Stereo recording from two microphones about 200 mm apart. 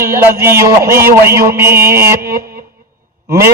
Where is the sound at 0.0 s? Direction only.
15° right (ahead or behind).